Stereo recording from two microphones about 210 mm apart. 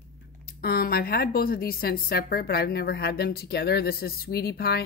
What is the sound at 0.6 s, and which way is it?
A woman's voice, 45° left (ahead or behind).